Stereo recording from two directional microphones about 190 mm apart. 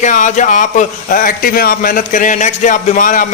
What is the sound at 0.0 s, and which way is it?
Speech, 40° left (ahead or behind).